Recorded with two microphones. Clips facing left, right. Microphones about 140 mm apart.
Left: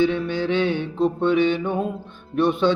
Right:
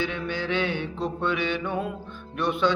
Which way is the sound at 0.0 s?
20° left (ahead or behind).